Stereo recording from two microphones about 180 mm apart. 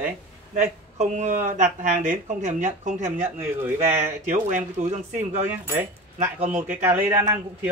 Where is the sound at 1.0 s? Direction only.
40° right (ahead or behind).